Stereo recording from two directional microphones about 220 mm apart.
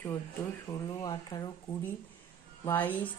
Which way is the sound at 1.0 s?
15° left (ahead or behind).